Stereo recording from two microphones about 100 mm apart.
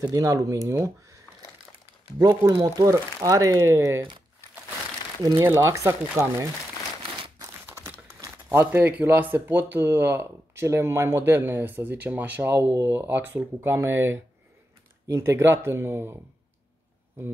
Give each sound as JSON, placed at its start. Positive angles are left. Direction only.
{"t": 0.0, "sound": "speech", "side_deg": -35}
{"t": 5.4, "sound": "speech", "side_deg": -25}
{"t": 7.0, "sound": "crumpling", "side_deg": -60}
{"t": 8.5, "sound": "speech", "side_deg": -20}